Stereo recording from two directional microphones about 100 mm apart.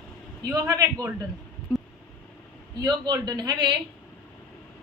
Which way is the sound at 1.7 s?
20° right (ahead or behind).